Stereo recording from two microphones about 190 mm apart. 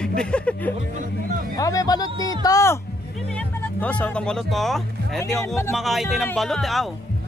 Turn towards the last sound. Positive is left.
turn(degrees=0)  # may be behind; listen again after turning